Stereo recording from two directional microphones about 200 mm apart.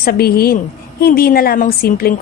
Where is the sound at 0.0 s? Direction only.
50° left (ahead or behind).